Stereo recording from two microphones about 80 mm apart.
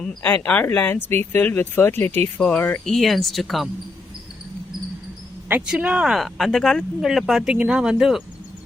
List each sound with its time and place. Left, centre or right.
0.2 s speech: left
2.8 s speech: centre
5.6 s speech: centre
6.1 s speech: centre